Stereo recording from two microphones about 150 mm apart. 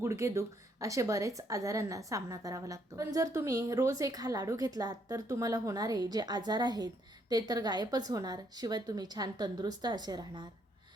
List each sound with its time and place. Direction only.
0.0 s a woman's voice: 20° right (ahead or behind)